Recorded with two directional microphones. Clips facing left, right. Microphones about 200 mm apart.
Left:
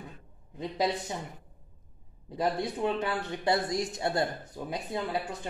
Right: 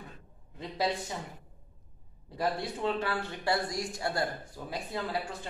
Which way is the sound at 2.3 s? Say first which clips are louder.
Left 3 dB; 20° left (ahead or behind).